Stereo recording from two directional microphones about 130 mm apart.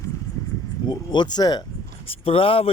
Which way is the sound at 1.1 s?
35° left (ahead or behind).